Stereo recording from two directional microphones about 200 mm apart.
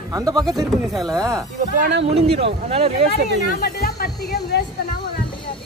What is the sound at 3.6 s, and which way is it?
Snake, 50° left (ahead or behind).